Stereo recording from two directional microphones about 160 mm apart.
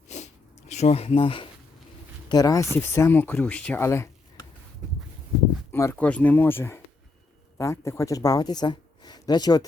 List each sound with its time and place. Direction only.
0.7 s speech: 45° left (ahead or behind)
2.3 s speech: 25° left (ahead or behind)
5.7 s speech: 15° left (ahead or behind)